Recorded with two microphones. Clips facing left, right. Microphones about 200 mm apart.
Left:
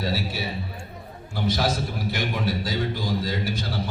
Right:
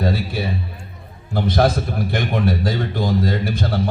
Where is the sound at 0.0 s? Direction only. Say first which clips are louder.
Right 6 dB; 55° right (ahead or behind).